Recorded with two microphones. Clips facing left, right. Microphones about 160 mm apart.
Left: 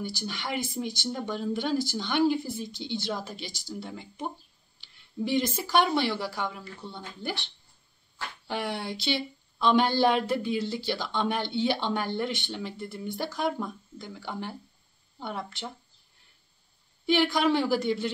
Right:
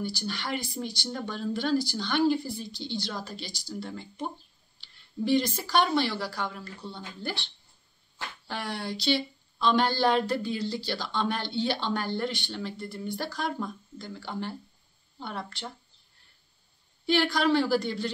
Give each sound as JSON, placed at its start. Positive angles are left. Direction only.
{"t": 0.0, "sound": "speech", "side_deg": 20}
{"t": 3.9, "sound": "speech", "side_deg": 10}
{"t": 5.2, "sound": "speech", "side_deg": 20}
{"t": 8.5, "sound": "speech", "side_deg": 20}
{"t": 17.0, "sound": "speech", "side_deg": 15}